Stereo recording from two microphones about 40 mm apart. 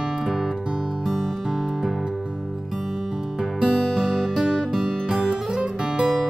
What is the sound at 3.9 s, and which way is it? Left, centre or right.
Music, centre.